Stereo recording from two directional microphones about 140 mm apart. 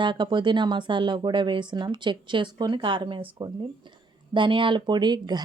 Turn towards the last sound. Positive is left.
turn(degrees=-30)  # may be behind; listen again after turning